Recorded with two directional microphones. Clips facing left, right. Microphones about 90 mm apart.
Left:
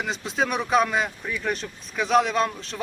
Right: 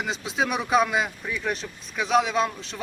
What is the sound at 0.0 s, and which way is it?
Speech, centre (ahead or behind).